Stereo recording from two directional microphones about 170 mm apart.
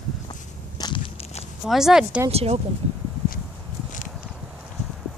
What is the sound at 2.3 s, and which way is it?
Speech, 35° right (ahead or behind).